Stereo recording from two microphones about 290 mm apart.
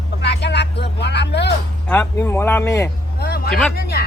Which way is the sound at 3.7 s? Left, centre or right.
Left.